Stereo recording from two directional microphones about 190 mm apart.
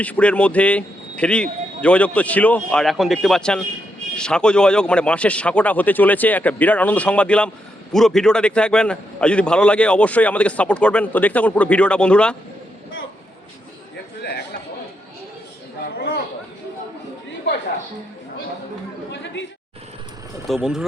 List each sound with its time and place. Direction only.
0.0 s a man's voice: 5° left (ahead or behind)
14.2 s chatter: 60° left (ahead or behind)
16.0 s a sound: 60° left (ahead or behind)
19.2 s chatter: 70° left (ahead or behind)
20.5 s a man's voice: centre (ahead or behind)